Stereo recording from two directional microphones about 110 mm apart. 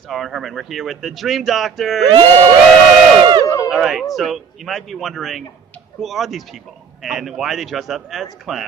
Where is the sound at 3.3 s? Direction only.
35° right (ahead or behind).